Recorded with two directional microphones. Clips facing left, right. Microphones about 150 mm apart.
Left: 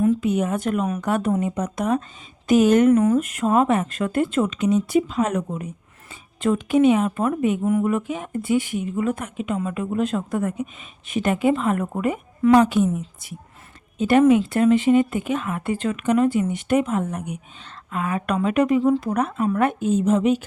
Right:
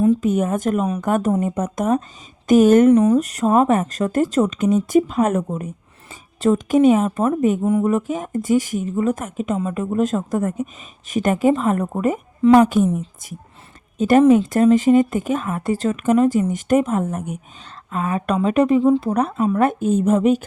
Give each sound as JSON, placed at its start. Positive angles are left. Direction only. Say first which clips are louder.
{"t": 0.2, "sound": "a woman's voice", "louder": "right 3 dB", "side_deg": -45}
{"t": 2.9, "sound": "speech", "louder": "right 3 dB", "side_deg": -30}
{"t": 7.6, "sound": "speech", "louder": "right 2 dB", "side_deg": -25}
{"t": 7.9, "sound": "a woman's voice", "louder": "right 3 dB", "side_deg": -40}
{"t": 17.9, "sound": "speech", "louder": "right 3 dB", "side_deg": -35}
{"t": 19.9, "sound": "a woman's voice", "louder": "right 2 dB", "side_deg": -55}